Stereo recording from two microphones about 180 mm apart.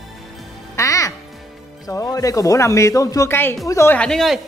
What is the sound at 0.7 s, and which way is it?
Speech, 15° left (ahead or behind).